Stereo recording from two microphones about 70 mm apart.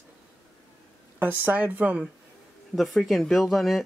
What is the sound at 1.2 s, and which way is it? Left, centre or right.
Speech, right.